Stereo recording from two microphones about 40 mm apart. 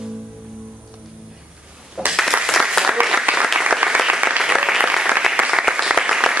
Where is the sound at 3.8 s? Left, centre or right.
Right.